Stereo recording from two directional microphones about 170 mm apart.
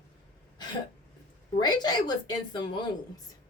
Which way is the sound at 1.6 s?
25° left (ahead or behind).